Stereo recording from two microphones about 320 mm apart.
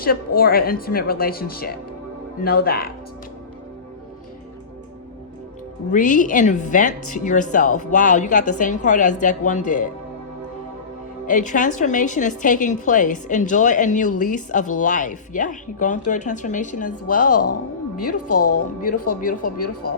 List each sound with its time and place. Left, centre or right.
0.3 s a woman's voice: left
5.9 s a woman's voice: left
11.3 s a woman's voice: left
17.1 s a woman's voice: left
19.2 s a woman's voice: left